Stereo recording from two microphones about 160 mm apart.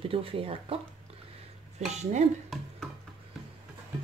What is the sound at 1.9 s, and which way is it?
Speech, 45° right (ahead or behind).